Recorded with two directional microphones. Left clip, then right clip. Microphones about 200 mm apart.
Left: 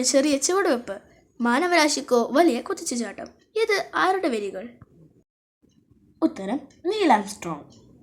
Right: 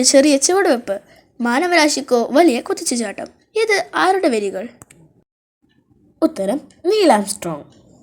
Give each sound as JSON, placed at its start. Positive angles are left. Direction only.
{"t": 0.0, "sound": "a woman's voice", "side_deg": -20}
{"t": 6.1, "sound": "a woman's voice", "side_deg": -35}